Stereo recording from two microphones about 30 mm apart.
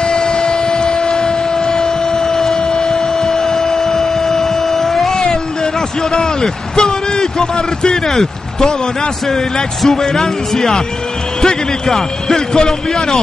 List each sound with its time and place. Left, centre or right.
0.0 s vehicle: left
2.6 s printer: left; by 5.2 s centre
5.2 s a sound: left
8.1 s speech: centre
9.9 s speech: centre
11.4 s a sound: centre
12.5 s a man's voice: left